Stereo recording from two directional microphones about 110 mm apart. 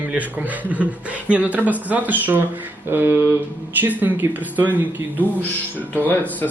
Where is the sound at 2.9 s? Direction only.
20° right (ahead or behind).